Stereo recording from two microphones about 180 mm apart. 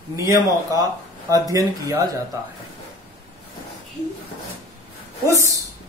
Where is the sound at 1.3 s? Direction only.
20° right (ahead or behind).